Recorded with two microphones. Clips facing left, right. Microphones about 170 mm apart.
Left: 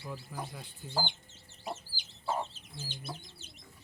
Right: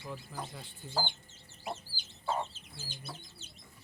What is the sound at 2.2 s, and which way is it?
Chicken, 5° left (ahead or behind).